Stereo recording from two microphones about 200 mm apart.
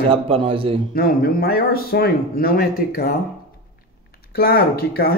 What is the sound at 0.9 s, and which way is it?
Speech, 50° left (ahead or behind).